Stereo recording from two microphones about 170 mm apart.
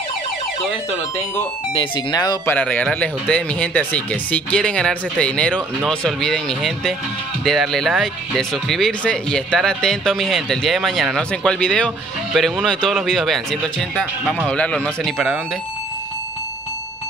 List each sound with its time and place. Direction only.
1.7 s speech: 30° left (ahead or behind)
2.4 s speech: 10° left (ahead or behind)